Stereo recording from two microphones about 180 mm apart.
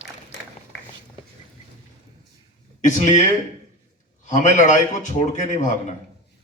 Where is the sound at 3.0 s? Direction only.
45° left (ahead or behind).